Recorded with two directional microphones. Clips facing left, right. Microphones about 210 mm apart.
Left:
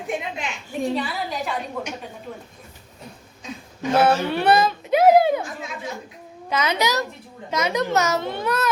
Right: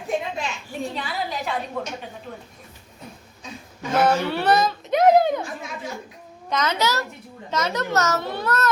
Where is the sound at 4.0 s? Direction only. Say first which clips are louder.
Even; 10° left (ahead or behind).